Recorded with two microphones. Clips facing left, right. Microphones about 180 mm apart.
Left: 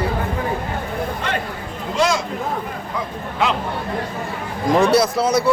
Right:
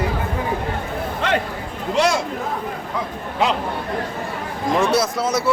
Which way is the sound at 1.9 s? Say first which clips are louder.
Right 1 dB; 65° right (ahead or behind).